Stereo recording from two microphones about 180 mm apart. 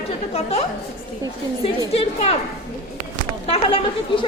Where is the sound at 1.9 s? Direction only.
30° left (ahead or behind).